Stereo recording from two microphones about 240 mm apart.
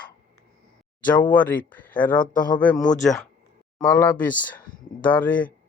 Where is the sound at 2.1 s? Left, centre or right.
Left.